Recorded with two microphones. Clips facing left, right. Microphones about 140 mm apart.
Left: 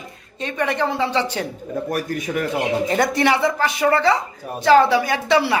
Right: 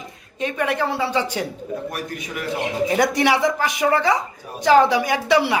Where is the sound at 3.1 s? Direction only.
15° right (ahead or behind).